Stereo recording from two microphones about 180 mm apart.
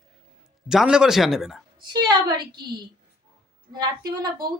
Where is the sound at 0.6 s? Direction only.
5° right (ahead or behind).